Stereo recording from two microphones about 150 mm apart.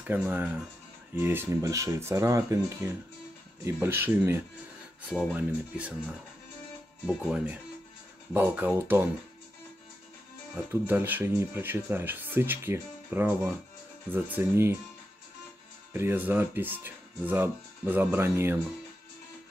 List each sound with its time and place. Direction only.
0.0 s speech: 10° right (ahead or behind)
10.7 s speech: 15° right (ahead or behind)
15.9 s speech: 15° right (ahead or behind)